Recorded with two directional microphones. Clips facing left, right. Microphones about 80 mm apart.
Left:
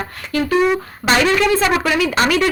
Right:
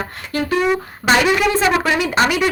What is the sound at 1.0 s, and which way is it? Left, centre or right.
Speech, centre.